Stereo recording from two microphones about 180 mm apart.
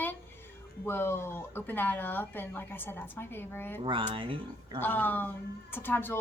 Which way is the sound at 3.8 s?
30° right (ahead or behind).